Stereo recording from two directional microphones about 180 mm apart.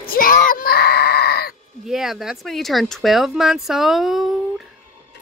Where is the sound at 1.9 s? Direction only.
Centre (ahead or behind).